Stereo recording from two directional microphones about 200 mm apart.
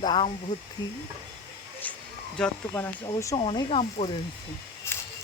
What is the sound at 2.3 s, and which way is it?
Speech, 5° left (ahead or behind).